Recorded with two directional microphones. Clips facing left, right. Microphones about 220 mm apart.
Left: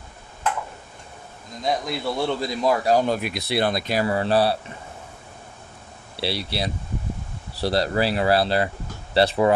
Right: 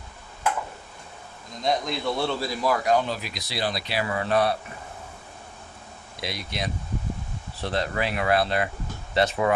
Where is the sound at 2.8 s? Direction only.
35° left (ahead or behind).